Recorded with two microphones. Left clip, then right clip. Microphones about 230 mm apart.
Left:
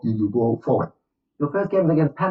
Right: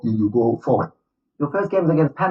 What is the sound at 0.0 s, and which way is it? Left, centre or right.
Speech, right.